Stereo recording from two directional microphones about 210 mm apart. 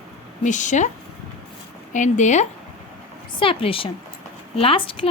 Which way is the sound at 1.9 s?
35° left (ahead or behind).